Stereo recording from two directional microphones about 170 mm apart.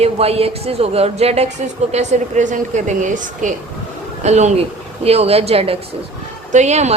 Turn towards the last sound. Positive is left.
turn(degrees=-40)  # may be behind; listen again after turning